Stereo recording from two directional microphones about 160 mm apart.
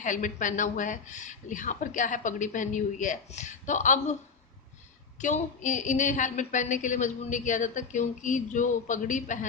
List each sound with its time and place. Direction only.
0.0 s a woman's voice: 55° left (ahead or behind)
5.2 s a woman's voice: 50° left (ahead or behind)